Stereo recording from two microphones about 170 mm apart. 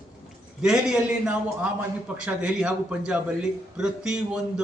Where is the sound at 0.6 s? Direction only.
5° right (ahead or behind).